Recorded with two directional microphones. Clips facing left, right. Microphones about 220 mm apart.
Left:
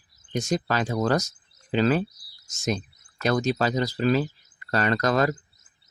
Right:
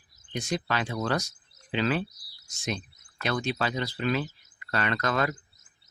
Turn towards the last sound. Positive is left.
turn(degrees=40)  # may be behind; listen again after turning